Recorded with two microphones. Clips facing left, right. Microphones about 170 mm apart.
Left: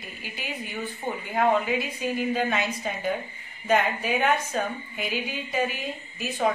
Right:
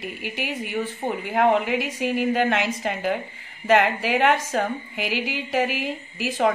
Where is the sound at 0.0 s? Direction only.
75° right (ahead or behind).